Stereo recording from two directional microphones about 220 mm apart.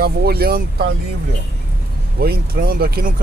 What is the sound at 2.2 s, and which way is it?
Speech, 45° right (ahead or behind).